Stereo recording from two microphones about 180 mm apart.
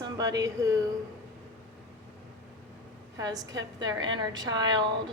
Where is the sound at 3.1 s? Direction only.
20° right (ahead or behind).